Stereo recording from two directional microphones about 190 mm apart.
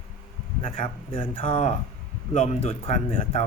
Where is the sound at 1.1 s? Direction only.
30° left (ahead or behind).